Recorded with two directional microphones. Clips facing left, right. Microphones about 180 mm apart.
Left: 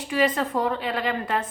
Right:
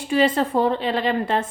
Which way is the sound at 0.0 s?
30° right (ahead or behind).